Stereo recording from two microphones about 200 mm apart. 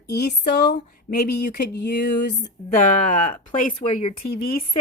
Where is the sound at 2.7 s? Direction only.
45° left (ahead or behind).